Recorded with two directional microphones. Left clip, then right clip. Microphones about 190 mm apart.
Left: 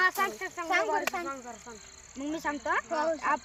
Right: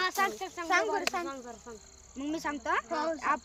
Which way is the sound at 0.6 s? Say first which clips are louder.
Left 1 dB; 15° right (ahead or behind).